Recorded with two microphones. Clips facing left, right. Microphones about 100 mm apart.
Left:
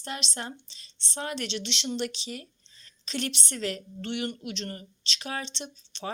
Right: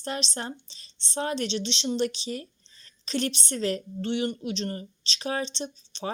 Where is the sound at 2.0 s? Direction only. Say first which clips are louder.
Right 5 dB; 35° right (ahead or behind).